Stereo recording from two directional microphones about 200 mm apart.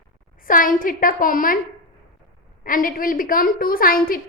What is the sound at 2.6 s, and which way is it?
A woman's voice, 45° left (ahead or behind).